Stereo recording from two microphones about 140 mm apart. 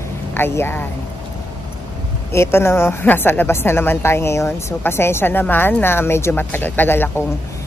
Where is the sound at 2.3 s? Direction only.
20° left (ahead or behind).